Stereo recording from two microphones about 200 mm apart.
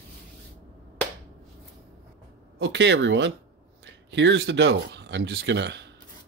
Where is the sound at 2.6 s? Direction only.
60° right (ahead or behind).